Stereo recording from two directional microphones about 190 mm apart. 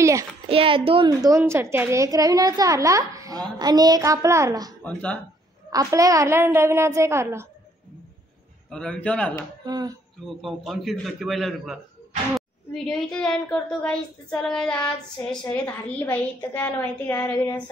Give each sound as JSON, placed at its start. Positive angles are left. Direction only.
{"t": 0.0, "sound": "a sound", "side_deg": -15}
{"t": 0.5, "sound": "a child's voice", "side_deg": -30}
{"t": 4.8, "sound": "a woman's voice", "side_deg": 5}
{"t": 5.7, "sound": "a woman's voice", "side_deg": -20}
{"t": 8.6, "sound": "a woman's voice", "side_deg": 5}
{"t": 9.7, "sound": "a child's voice", "side_deg": -20}
{"t": 10.4, "sound": "a woman's voice", "side_deg": 0}